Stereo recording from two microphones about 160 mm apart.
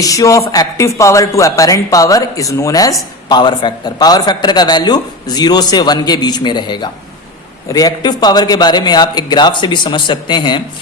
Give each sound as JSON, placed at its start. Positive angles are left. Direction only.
{"t": 0.0, "sound": "a man's voice", "side_deg": 20}